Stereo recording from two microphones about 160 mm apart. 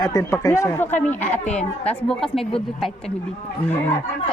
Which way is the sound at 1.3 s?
5° left (ahead or behind).